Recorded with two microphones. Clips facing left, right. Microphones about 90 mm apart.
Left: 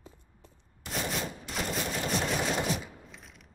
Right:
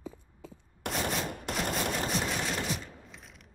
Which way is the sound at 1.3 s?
60° right (ahead or behind).